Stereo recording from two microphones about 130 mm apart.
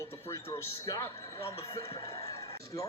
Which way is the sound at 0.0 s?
20° left (ahead or behind).